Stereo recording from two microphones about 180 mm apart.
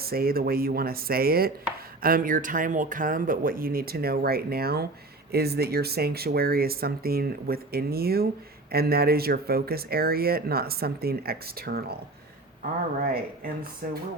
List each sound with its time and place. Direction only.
0.0 s speech: 55° right (ahead or behind)
13.8 s speech: 55° right (ahead or behind)